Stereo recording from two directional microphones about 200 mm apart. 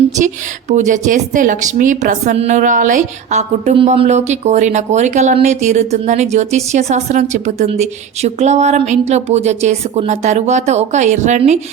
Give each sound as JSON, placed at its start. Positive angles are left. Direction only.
{"t": 0.7, "sound": "a woman's voice", "side_deg": -35}